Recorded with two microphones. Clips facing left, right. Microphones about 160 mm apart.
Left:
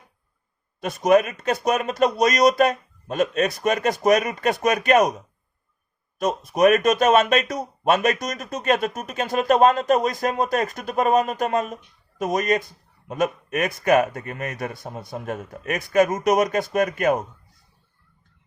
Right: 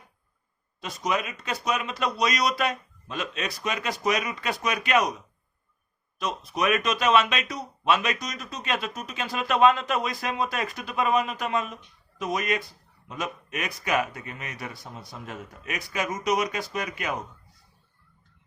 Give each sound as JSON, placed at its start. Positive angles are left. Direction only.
{"t": 0.8, "sound": "speech", "side_deg": 50}
{"t": 6.1, "sound": "speech", "side_deg": 45}